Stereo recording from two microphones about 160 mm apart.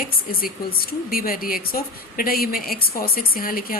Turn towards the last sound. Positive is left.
turn(degrees=60)  # may be behind; listen again after turning